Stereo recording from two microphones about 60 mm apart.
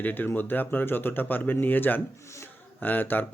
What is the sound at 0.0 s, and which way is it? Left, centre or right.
Speech, left.